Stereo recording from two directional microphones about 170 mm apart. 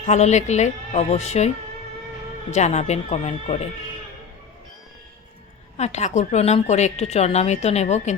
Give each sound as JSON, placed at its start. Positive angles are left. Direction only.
{"t": 0.1, "sound": "a woman's voice", "side_deg": 40}
{"t": 2.5, "sound": "a woman's voice", "side_deg": 40}
{"t": 5.7, "sound": "a woman's voice", "side_deg": 40}